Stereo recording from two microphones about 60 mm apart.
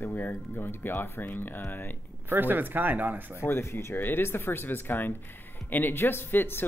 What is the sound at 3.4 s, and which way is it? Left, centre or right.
Speech, left.